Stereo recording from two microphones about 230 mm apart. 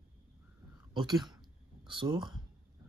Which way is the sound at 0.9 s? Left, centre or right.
Centre.